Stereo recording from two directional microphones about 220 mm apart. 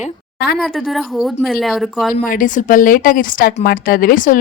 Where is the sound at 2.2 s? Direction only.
40° left (ahead or behind).